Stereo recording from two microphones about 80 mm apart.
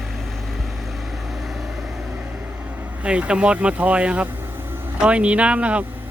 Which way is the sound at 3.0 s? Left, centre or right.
Centre.